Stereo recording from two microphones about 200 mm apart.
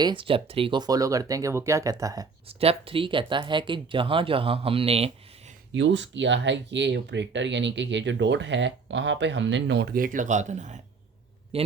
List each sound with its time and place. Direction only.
0.0 s speech: 25° right (ahead or behind)
2.5 s speech: 30° right (ahead or behind)
5.7 s a man's voice: 65° right (ahead or behind); by 11.7 s 30° right (ahead or behind)